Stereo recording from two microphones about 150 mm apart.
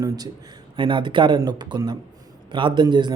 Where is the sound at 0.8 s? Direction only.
35° right (ahead or behind).